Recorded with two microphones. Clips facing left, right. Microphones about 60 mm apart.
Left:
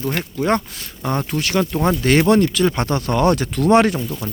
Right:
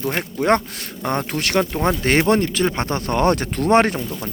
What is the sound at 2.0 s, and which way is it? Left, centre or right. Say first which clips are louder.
Speech: left 3 dB; right.